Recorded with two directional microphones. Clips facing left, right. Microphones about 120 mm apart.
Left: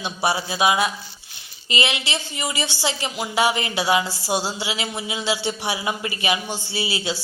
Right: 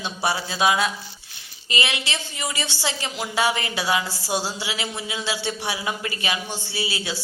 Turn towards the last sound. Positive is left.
turn(degrees=20)  # may be behind; listen again after turning